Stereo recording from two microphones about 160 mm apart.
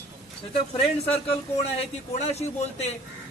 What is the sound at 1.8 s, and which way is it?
A man's voice, 40° left (ahead or behind).